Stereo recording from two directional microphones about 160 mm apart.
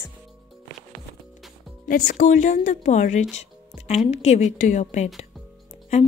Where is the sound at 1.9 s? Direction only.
60° left (ahead or behind).